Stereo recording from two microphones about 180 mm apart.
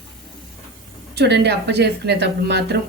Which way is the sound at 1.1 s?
65° right (ahead or behind).